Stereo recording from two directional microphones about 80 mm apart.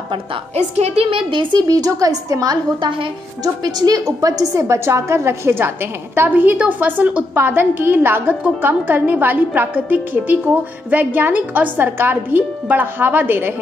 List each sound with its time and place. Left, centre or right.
1.1 s speech: right
1.7 s a woman's voice: right
2.8 s speech: right
3.7 s a woman's voice: right